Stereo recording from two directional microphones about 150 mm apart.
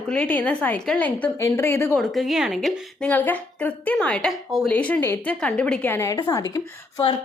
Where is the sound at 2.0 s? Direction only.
Centre (ahead or behind); by 7.0 s 20° left (ahead or behind).